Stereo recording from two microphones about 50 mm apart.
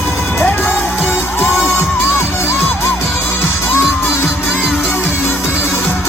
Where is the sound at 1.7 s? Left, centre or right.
Left.